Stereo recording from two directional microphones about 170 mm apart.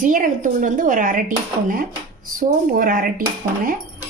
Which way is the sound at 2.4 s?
55° right (ahead or behind).